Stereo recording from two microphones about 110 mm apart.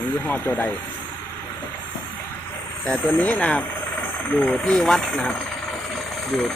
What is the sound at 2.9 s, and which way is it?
Speech, 10° left (ahead or behind).